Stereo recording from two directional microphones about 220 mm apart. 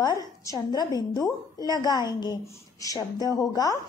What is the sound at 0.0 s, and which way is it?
A woman's voice, 15° left (ahead or behind).